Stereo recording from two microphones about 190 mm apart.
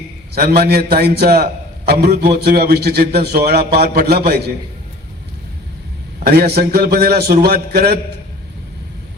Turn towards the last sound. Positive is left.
turn(degrees=-55)  # may be behind; listen again after turning